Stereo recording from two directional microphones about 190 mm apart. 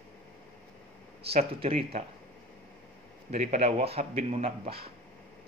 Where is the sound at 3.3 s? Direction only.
35° right (ahead or behind).